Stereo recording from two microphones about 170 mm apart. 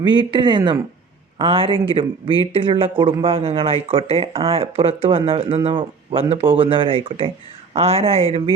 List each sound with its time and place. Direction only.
0.0 s speech: 25° right (ahead or behind)